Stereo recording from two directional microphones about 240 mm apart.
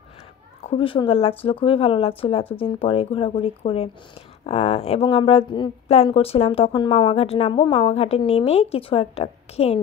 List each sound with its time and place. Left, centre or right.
0.7 s speech: left